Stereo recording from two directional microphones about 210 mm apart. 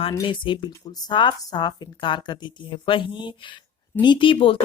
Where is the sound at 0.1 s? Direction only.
20° left (ahead or behind).